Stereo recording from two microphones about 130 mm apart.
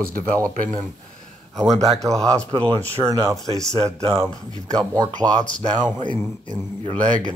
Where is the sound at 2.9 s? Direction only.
20° right (ahead or behind).